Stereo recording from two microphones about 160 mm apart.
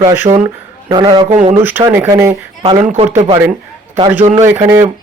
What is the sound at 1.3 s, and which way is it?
Speech, 55° right (ahead or behind).